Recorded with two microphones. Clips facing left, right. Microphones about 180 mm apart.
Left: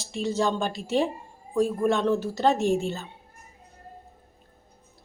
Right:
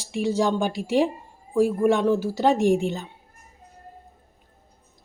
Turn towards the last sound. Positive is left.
turn(degrees=-15)  # may be behind; listen again after turning